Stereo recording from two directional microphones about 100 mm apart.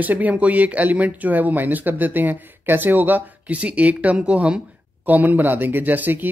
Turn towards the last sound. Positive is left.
turn(degrees=-20)  # may be behind; listen again after turning